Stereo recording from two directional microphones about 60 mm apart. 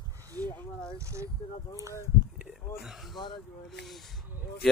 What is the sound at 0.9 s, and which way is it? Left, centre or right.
Speech, right.